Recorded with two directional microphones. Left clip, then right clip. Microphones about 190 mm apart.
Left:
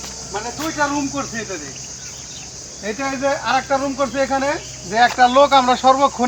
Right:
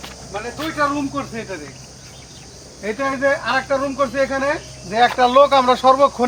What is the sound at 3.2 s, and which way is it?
Speech, 20° right (ahead or behind).